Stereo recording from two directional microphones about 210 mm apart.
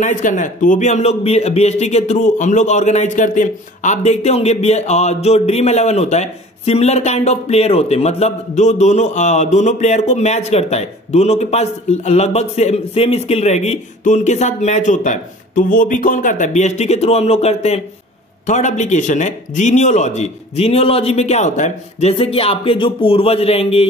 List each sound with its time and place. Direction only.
0.0 s a man's voice: 35° left (ahead or behind)